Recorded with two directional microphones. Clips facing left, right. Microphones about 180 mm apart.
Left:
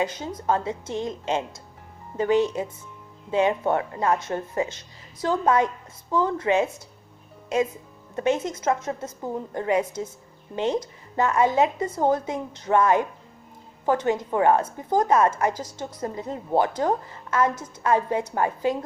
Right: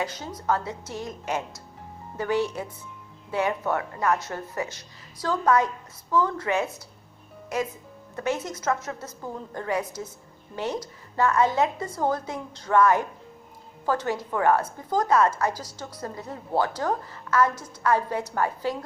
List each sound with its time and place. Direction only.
0.0 s a woman's voice: 20° left (ahead or behind)
8.1 s a woman's voice: 25° left (ahead or behind)